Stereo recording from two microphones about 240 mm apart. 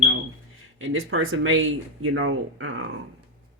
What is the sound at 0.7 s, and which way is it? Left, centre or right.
Speech, right.